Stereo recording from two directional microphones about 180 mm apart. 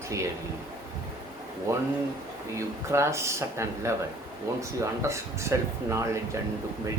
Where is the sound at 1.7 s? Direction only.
15° right (ahead or behind).